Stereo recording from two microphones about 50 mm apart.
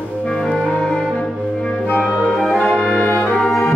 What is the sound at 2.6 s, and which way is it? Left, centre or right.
Brass instrument, left.